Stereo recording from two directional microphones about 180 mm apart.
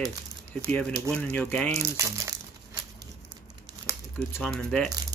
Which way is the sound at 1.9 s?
15° right (ahead or behind).